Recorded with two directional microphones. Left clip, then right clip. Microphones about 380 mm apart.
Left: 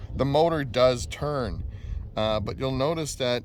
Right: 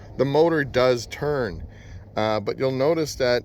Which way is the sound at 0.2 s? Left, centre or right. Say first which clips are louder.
Right 3 dB; centre.